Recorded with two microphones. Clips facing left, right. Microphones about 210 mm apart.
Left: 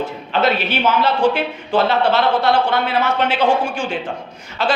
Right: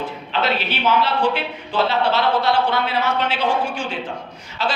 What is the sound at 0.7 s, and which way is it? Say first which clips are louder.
A man's voice: left 2 dB; 45° left (ahead or behind).